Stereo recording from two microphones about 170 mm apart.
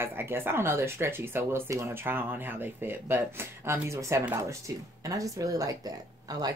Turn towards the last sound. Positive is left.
turn(degrees=-20)  # may be behind; listen again after turning